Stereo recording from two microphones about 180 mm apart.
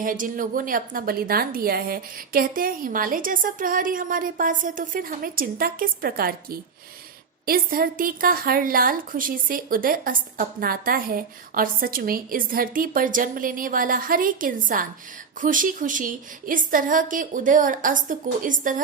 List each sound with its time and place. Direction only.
0.0 s a woman's voice: 50° right (ahead or behind)